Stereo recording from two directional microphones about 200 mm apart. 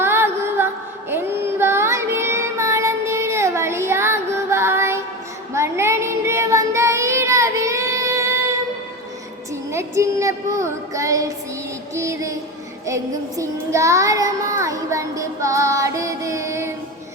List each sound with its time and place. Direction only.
0.0 s music: 10° right (ahead or behind)
1.1 s child singing: 10° right (ahead or behind)
9.7 s child singing: 15° right (ahead or behind)
11.9 s music: 15° right (ahead or behind)
12.8 s child singing: 15° right (ahead or behind)